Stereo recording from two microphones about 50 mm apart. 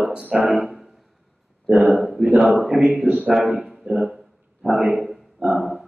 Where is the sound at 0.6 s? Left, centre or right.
Centre.